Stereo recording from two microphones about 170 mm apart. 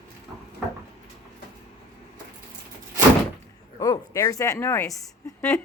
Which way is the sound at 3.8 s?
20° left (ahead or behind).